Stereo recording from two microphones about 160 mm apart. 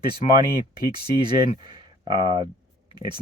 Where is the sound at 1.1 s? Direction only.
30° right (ahead or behind).